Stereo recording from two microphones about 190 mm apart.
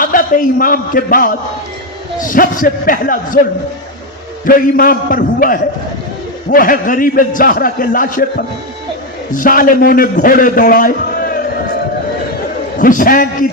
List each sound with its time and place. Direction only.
0.0 s a man's voice: 45° left (ahead or behind)
4.4 s a man's voice: 45° left (ahead or behind)
9.3 s a man's voice: 45° left (ahead or behind)
12.8 s a man's voice: 45° left (ahead or behind)